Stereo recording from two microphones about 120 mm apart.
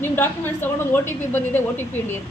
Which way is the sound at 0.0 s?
15° left (ahead or behind).